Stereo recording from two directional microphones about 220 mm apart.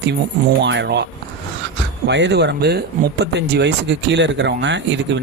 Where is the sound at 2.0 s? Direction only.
50° right (ahead or behind).